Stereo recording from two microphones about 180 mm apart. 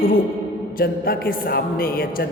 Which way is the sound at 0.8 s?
55° left (ahead or behind).